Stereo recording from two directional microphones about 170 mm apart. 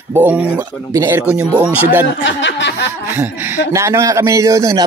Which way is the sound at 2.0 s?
85° left.